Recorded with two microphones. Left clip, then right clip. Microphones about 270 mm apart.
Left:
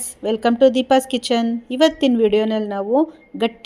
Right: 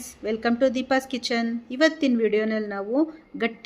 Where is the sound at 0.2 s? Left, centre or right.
Centre.